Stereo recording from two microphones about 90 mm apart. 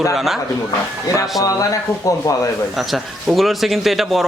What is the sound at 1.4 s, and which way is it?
Speech, 40° left (ahead or behind).